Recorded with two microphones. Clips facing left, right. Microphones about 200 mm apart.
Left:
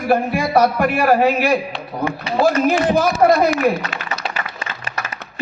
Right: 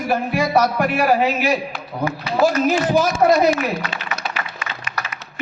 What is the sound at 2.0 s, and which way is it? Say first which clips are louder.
Speech: even; 30° left (ahead or behind).